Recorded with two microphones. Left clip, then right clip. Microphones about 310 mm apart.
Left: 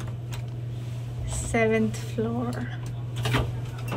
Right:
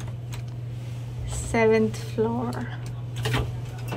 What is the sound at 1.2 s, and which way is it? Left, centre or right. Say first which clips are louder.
A woman's voice: right 3 dB; centre.